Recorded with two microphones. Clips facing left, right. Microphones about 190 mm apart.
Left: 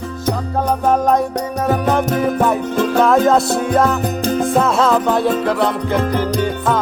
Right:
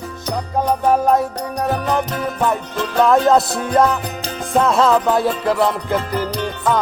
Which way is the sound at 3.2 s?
Centre (ahead or behind).